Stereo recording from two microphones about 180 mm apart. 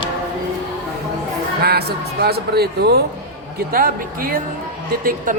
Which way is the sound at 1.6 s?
60° right (ahead or behind).